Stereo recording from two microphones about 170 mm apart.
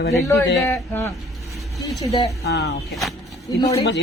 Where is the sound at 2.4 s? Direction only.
80° left.